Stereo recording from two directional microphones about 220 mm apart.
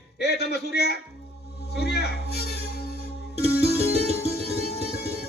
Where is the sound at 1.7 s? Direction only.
50° left (ahead or behind).